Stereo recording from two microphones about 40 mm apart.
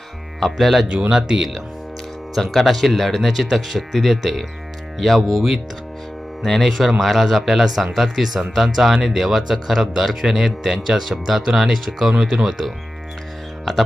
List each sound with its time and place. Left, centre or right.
0.3 s speech: centre
0.9 s speech: right
2.3 s speech: centre